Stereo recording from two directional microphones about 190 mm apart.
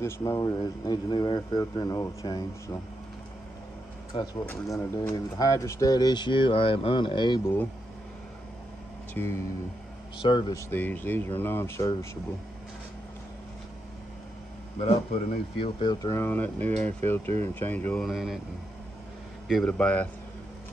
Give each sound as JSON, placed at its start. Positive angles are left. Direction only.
{"t": 0.0, "sound": "speech", "side_deg": 15}
{"t": 4.1, "sound": "speech", "side_deg": 20}
{"t": 9.1, "sound": "speech", "side_deg": 15}
{"t": 10.2, "sound": "speech", "side_deg": 25}
{"t": 10.7, "sound": "speech", "side_deg": 10}
{"t": 15.5, "sound": "speech", "side_deg": 25}
{"t": 19.4, "sound": "speech", "side_deg": 0}